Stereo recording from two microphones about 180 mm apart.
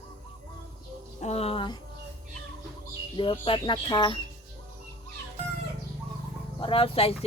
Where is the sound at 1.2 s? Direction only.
35° left (ahead or behind).